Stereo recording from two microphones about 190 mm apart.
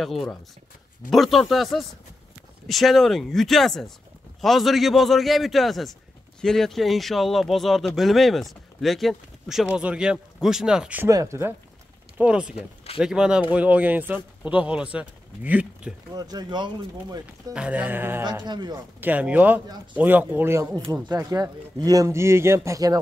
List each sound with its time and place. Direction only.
0.0 s speech: centre (ahead or behind)
16.2 s speech: 20° right (ahead or behind)
17.6 s speech: 5° right (ahead or behind)
18.2 s speech: 20° right (ahead or behind)
18.9 s speech: 10° right (ahead or behind)